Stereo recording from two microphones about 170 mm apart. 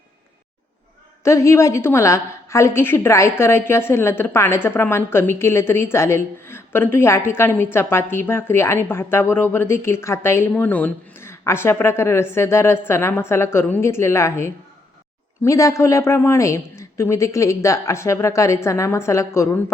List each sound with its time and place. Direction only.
1.2 s a woman's voice: 15° left (ahead or behind)